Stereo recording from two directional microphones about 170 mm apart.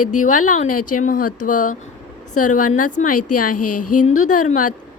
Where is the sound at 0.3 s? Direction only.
45° left (ahead or behind).